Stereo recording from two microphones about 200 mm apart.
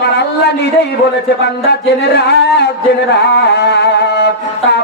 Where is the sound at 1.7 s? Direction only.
60° left (ahead or behind).